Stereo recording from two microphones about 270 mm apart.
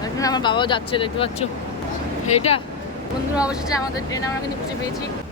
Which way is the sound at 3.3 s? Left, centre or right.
Centre.